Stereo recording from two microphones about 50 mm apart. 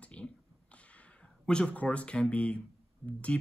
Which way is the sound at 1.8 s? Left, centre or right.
Left.